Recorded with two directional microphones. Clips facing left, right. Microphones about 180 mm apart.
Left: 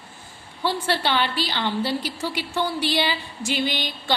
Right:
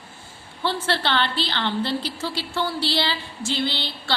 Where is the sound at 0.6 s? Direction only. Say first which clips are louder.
Left 1 dB; 15° left (ahead or behind).